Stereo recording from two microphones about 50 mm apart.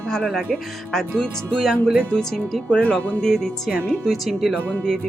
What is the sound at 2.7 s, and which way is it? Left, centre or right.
Speech, left.